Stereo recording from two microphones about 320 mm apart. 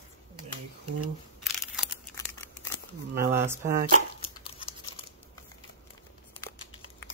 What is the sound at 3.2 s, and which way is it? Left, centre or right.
Speech, centre.